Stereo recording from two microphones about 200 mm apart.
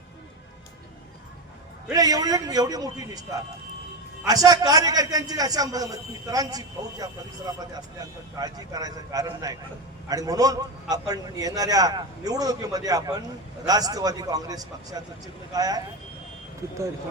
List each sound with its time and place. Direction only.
1.9 s a man's voice: 20° right (ahead or behind)
4.3 s a man's voice: 20° right (ahead or behind)